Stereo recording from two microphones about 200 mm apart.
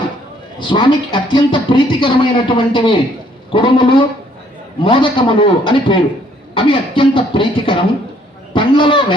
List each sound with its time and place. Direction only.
0.6 s a man's voice: 25° left (ahead or behind)